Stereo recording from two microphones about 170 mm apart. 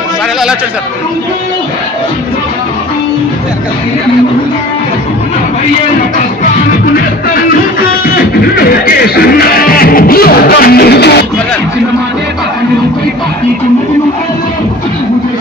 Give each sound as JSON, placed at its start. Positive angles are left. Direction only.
{"t": 8.5, "sound": "speech", "side_deg": 65}